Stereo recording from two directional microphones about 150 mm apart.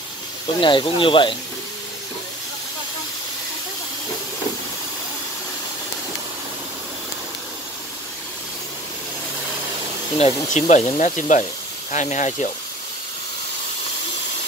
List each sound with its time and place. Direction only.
0.6 s speech: 30° left (ahead or behind)
10.1 s speech: 50° left (ahead or behind)